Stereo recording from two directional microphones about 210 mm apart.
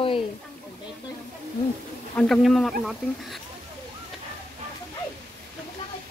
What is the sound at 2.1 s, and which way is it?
Speech, 5° left (ahead or behind).